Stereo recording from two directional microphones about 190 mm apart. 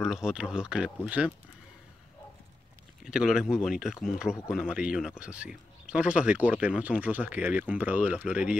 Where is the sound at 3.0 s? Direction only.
5° right (ahead or behind).